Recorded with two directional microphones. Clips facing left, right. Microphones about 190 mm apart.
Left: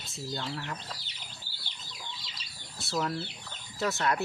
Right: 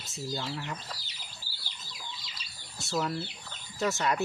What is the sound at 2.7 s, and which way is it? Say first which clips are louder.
Speech: even; centre (ahead or behind).